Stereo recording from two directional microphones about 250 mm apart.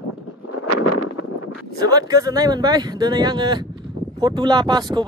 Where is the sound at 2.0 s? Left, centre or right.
Centre.